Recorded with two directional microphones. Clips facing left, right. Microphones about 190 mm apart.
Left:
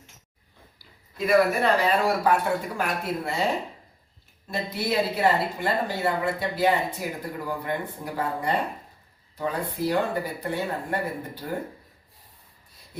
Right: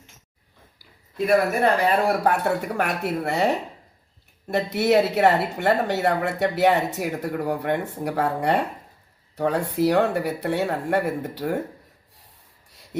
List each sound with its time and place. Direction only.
1.6 s speech: 55° right (ahead or behind); by 11.6 s 80° right